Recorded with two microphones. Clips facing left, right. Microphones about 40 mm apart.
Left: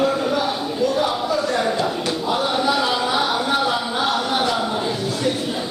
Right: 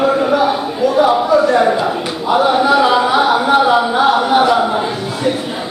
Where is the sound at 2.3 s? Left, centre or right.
Centre.